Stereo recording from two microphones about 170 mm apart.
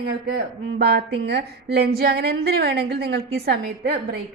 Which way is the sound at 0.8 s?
70° right (ahead or behind).